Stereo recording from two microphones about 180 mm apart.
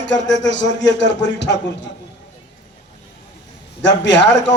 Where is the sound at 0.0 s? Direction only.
80° left.